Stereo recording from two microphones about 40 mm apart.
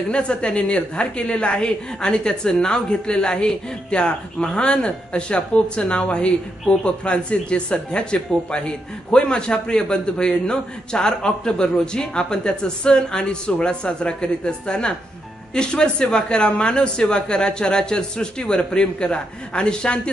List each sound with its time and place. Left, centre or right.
0.1 s speech: left